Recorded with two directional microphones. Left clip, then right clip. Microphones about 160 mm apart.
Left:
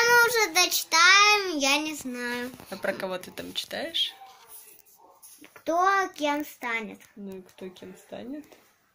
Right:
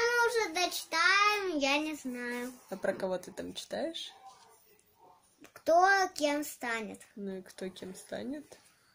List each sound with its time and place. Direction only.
0.0 s child singing: 30° left (ahead or behind)
2.7 s speech: 30° right (ahead or behind); by 4.1 s 50° right (ahead or behind)
5.4 s a child's voice: 10° right (ahead or behind)
7.7 s speech: 55° right (ahead or behind)